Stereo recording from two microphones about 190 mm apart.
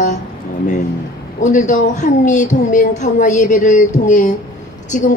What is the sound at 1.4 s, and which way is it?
A woman's voice, 40° left (ahead or behind).